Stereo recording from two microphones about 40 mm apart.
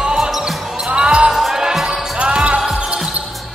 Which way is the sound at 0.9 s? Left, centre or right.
Right.